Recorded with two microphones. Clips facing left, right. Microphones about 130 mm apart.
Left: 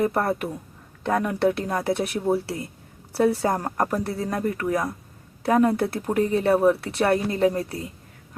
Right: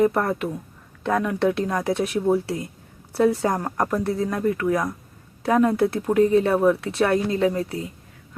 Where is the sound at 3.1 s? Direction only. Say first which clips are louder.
Right 1 dB; 35° left (ahead or behind).